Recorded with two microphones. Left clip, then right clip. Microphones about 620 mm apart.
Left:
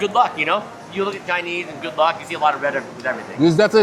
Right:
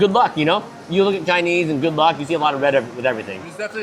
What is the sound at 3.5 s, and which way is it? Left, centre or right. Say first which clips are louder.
Speech: left 12 dB; left.